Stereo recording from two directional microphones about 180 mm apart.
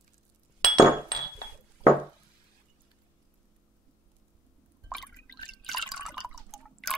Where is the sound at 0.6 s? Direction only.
20° right (ahead or behind).